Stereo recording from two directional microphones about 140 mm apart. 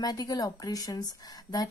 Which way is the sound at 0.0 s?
25° left (ahead or behind).